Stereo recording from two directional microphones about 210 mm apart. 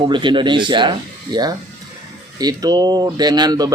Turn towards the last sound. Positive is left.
turn(degrees=-20)  # may be behind; listen again after turning